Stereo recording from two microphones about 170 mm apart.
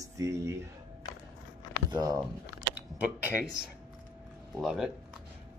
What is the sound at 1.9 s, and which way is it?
Speech, 20° right (ahead or behind).